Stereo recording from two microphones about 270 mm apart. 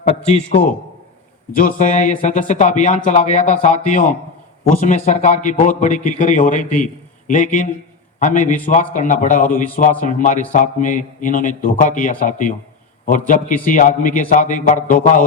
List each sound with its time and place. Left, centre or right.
1.5 s a man's voice: left